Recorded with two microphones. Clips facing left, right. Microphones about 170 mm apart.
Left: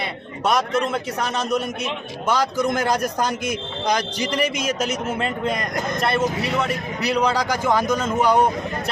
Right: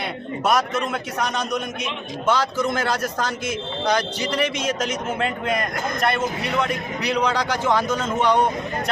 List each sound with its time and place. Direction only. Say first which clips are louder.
0.0 s a man's voice: even; centre (ahead or behind)